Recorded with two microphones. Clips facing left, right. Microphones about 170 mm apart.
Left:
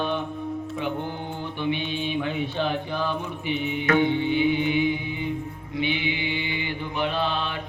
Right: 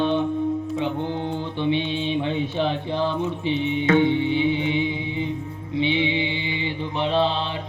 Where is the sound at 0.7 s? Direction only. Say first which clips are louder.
Right 4 dB; 25° right (ahead or behind).